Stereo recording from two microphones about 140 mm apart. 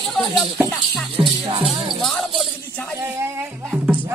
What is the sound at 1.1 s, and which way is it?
Music, 40° right (ahead or behind).